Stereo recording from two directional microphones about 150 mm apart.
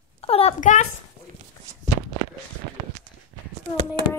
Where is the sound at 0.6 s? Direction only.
55° left (ahead or behind).